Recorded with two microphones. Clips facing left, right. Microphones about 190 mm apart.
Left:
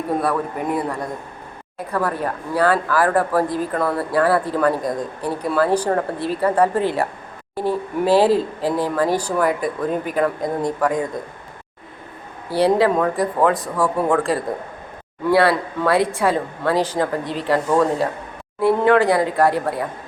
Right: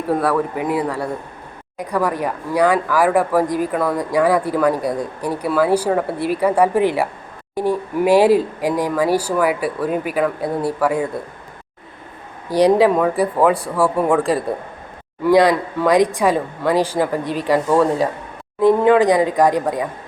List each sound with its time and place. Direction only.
0.1 s speech: 10° right (ahead or behind)
7.5 s a sound: 15° right (ahead or behind)
8.0 s speech: 15° right (ahead or behind)
12.5 s speech: 15° right (ahead or behind)